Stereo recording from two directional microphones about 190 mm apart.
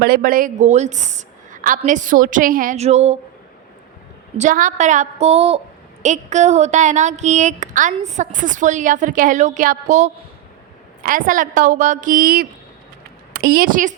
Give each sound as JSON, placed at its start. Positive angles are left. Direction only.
{"t": 0.0, "sound": "a woman's voice", "side_deg": -50}
{"t": 4.4, "sound": "a woman's voice", "side_deg": -40}